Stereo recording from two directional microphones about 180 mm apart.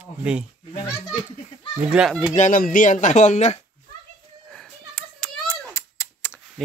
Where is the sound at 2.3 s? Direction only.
45° left (ahead or behind).